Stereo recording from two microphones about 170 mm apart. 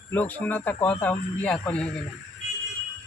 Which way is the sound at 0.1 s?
10° left (ahead or behind).